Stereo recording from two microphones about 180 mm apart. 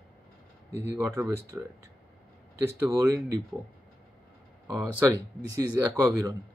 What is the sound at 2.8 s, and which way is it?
Speech, 15° right (ahead or behind).